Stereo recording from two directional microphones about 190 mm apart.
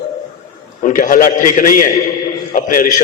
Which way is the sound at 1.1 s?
45° left (ahead or behind).